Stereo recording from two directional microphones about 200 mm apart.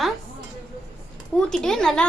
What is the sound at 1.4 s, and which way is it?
Speech, 5° left (ahead or behind).